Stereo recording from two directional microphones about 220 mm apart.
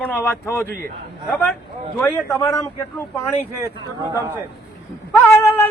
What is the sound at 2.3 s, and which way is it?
Speech, 15° left (ahead or behind).